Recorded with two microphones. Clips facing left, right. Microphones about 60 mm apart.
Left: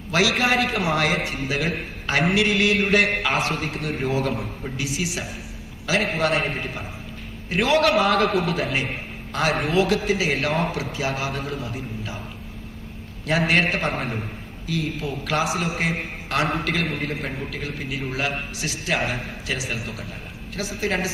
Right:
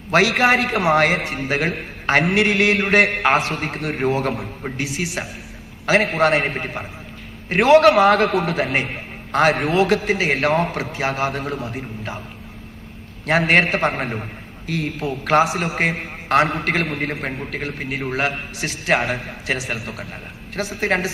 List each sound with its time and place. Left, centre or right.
0.1 s a man's voice: right
13.5 s a man's voice: right